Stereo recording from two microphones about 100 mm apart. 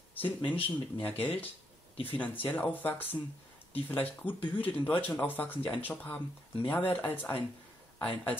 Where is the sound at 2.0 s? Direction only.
15° left (ahead or behind).